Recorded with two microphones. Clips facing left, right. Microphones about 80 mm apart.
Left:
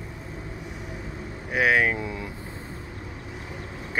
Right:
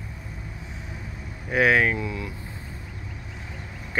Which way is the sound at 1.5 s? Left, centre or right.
Centre.